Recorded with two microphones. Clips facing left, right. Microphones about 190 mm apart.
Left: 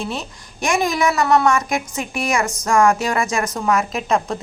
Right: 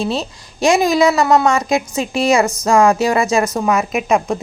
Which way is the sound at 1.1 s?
25° right (ahead or behind).